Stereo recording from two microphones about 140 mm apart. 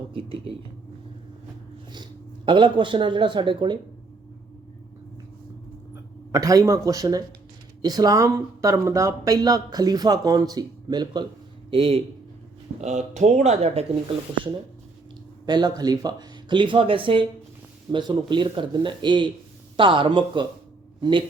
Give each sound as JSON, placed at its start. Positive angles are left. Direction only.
{"t": 0.1, "sound": "speech", "side_deg": -40}
{"t": 2.5, "sound": "speech", "side_deg": -35}
{"t": 5.9, "sound": "speech", "side_deg": -25}
{"t": 12.8, "sound": "speech", "side_deg": -55}
{"t": 15.4, "sound": "speech", "side_deg": -30}